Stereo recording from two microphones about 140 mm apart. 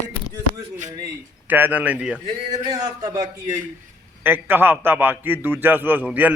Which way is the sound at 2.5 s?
30° right (ahead or behind).